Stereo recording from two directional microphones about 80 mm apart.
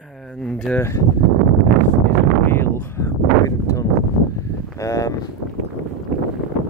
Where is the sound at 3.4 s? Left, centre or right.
Left.